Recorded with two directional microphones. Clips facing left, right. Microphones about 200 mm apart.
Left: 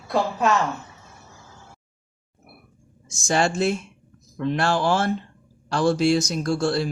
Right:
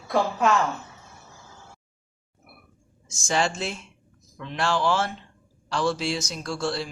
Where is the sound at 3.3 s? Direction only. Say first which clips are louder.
Left 5 dB; 50° left (ahead or behind).